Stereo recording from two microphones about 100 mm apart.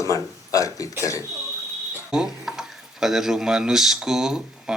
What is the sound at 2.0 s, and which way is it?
Speech, 5° right (ahead or behind).